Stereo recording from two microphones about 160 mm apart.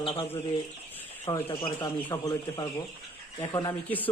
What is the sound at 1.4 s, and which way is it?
Speech, 30° left (ahead or behind).